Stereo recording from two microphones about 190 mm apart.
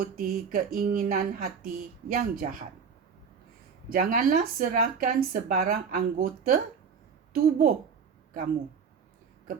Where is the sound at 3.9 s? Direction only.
45° right (ahead or behind).